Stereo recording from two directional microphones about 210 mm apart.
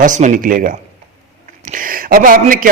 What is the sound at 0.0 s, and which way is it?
A man's voice, 40° right (ahead or behind).